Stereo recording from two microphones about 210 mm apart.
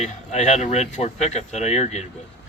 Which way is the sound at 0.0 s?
30° left (ahead or behind).